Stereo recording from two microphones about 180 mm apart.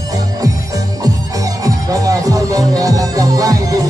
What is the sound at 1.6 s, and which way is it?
Music, 20° right (ahead or behind).